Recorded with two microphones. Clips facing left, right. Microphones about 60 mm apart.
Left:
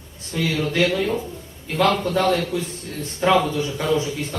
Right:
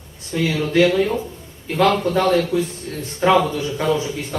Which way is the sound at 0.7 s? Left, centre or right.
Centre.